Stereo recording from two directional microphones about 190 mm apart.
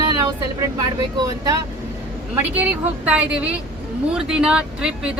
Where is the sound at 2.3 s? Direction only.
10° right (ahead or behind).